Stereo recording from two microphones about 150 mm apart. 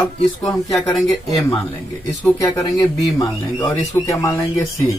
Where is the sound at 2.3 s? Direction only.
20° left (ahead or behind).